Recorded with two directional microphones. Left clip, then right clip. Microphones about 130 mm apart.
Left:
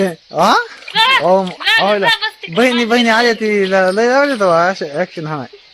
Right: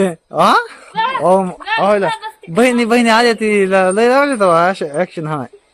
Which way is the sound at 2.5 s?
35° right (ahead or behind).